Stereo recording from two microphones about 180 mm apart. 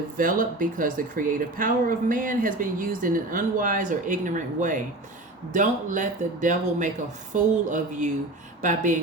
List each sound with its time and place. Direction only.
0.2 s speech: 50° right (ahead or behind)